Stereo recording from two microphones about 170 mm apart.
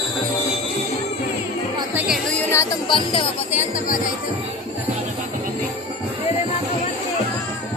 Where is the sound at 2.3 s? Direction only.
15° left (ahead or behind).